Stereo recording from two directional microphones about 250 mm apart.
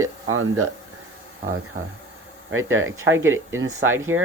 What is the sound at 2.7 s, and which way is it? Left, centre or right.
Speech, right.